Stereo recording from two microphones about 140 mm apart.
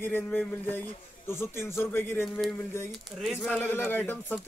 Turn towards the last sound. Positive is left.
turn(degrees=15)  # may be behind; listen again after turning